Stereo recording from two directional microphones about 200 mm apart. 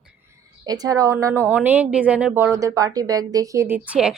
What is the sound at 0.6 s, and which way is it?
A woman's voice, 20° right (ahead or behind).